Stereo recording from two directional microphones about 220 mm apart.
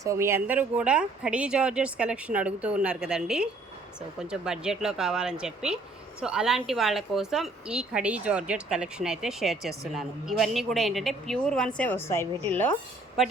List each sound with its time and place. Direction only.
0.0 s a woman's voice: 15° right (ahead or behind)